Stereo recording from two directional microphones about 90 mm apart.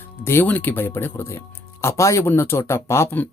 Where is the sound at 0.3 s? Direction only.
25° left (ahead or behind).